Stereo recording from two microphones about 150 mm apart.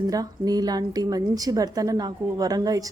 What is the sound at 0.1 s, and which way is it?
A woman's voice, 25° right (ahead or behind).